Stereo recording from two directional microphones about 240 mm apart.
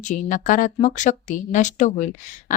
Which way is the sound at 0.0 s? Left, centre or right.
Left.